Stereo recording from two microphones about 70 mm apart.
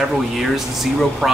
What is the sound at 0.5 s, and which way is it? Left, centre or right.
Speech, centre.